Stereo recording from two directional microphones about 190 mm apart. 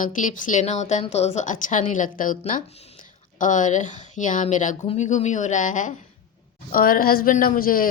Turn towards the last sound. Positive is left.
turn(degrees=50)  # may be behind; listen again after turning